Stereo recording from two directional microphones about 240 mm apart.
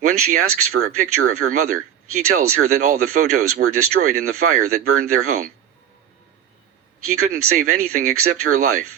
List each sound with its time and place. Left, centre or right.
0.0 s a sound: right
0.3 s speech: right
7.0 s speech: right